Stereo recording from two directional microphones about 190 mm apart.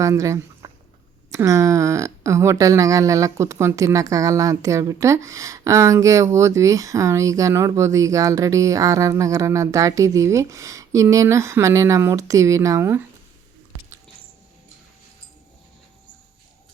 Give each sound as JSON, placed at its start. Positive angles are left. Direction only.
{"t": 0.0, "sound": "speech", "side_deg": -15}